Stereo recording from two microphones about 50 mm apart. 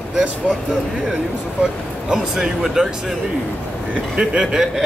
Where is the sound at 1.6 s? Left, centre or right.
Centre.